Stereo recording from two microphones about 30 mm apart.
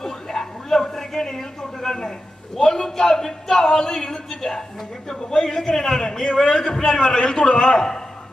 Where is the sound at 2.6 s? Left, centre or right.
Centre.